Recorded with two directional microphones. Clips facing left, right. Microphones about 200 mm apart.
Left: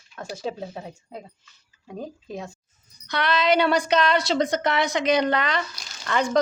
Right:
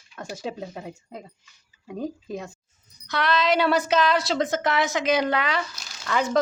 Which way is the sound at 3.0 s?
Centre (ahead or behind).